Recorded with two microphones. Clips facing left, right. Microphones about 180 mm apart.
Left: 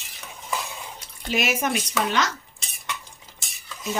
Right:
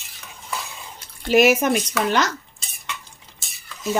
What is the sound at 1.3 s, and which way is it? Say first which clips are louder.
Speech: right 9 dB; 50° right (ahead or behind).